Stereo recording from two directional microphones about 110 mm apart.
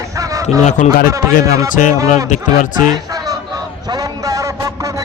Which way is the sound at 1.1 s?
30° right (ahead or behind).